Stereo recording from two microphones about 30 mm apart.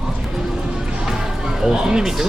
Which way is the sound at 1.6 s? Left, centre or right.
Centre.